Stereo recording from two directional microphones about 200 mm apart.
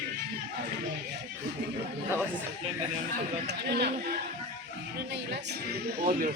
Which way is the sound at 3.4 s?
55° right (ahead or behind).